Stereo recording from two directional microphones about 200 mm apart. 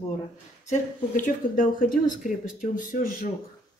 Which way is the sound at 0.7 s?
40° left (ahead or behind).